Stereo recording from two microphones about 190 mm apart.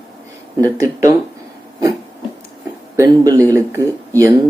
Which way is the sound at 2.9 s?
15° right (ahead or behind).